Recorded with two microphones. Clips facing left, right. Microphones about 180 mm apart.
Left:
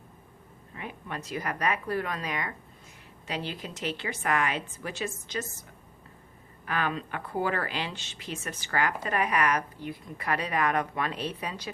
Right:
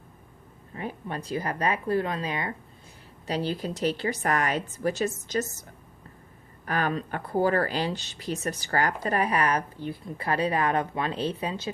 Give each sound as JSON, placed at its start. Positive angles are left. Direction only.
{"t": 0.8, "sound": "speech", "side_deg": -35}
{"t": 6.7, "sound": "speech", "side_deg": -40}